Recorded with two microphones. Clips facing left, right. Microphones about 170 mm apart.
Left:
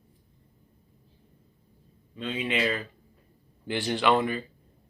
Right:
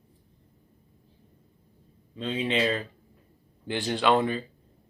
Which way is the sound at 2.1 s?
30° right (ahead or behind).